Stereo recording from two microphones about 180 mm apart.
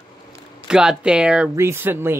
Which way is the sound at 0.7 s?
5° right (ahead or behind).